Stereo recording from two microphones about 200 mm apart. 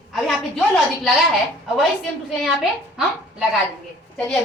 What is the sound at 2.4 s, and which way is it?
A child's voice, 5° right (ahead or behind).